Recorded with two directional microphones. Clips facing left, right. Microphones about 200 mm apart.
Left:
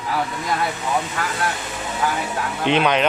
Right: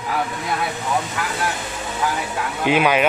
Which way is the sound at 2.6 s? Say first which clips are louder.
Right 1 dB; 5° right (ahead or behind).